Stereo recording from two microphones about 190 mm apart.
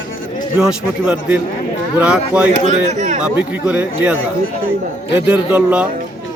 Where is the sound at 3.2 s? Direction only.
5° right (ahead or behind).